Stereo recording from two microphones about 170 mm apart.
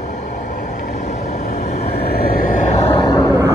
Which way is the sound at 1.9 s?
65° left (ahead or behind).